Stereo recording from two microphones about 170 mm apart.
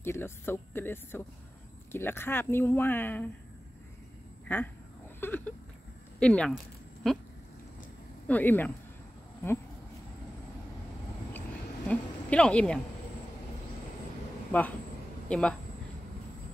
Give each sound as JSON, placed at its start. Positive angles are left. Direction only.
{"t": 0.0, "sound": "speech", "side_deg": 15}
{"t": 4.5, "sound": "speech", "side_deg": 10}
{"t": 8.3, "sound": "speech", "side_deg": 10}
{"t": 11.9, "sound": "a woman's voice", "side_deg": 5}
{"t": 15.2, "sound": "speech", "side_deg": 5}